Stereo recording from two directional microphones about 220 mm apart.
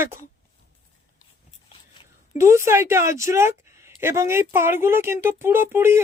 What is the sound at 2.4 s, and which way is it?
A woman's voice, 10° right (ahead or behind).